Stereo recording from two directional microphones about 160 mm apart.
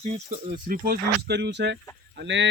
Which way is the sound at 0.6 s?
65° right (ahead or behind).